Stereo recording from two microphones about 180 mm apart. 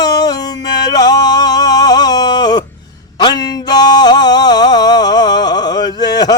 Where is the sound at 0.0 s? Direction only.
20° left (ahead or behind).